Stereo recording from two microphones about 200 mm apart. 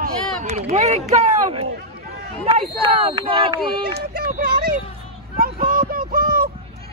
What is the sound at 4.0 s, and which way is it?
Speech, 45° right (ahead or behind).